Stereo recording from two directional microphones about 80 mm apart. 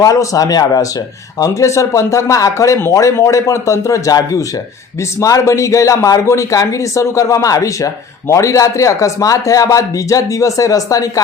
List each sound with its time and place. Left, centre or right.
0.0 s speech: left